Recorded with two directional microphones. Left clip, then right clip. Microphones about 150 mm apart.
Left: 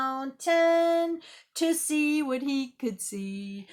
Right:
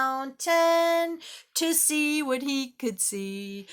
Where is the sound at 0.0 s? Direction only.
15° right (ahead or behind).